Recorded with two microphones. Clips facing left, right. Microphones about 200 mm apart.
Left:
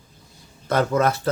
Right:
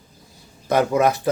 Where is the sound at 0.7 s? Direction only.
15° right (ahead or behind).